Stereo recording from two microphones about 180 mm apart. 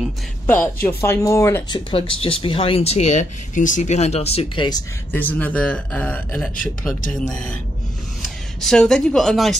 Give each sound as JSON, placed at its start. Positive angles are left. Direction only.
{"t": 0.8, "sound": "speech", "side_deg": 15}
{"t": 1.9, "sound": "speech", "side_deg": 30}
{"t": 5.1, "sound": "speech", "side_deg": 10}